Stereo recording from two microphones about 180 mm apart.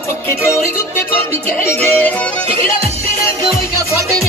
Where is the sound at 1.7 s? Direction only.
10° left (ahead or behind).